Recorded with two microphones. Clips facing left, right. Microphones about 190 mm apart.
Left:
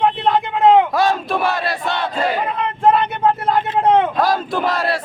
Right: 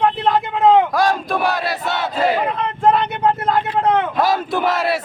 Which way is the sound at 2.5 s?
5° left (ahead or behind).